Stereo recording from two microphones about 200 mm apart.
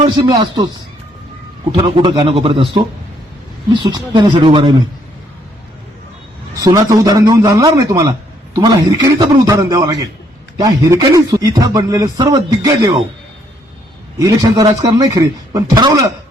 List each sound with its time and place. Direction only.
0.2 s speech: 20° right (ahead or behind)
1.7 s speech: 25° right (ahead or behind)
6.6 s a man's voice: 15° right (ahead or behind)
14.2 s a man's voice: 20° right (ahead or behind)